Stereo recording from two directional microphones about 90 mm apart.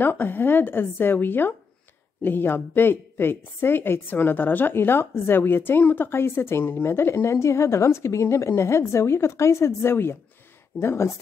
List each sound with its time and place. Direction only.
0.0 s a woman's voice: 25° left (ahead or behind)